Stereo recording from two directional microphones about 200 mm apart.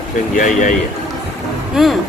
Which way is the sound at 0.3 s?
40° left (ahead or behind).